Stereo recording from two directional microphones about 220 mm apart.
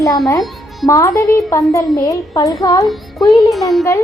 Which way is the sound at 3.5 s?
Centre (ahead or behind).